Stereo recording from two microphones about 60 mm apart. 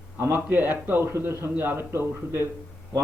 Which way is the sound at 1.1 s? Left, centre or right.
Right.